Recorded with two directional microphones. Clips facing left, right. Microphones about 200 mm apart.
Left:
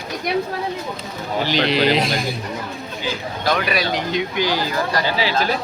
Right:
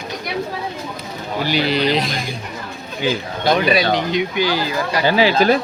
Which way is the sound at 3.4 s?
25° right (ahead or behind).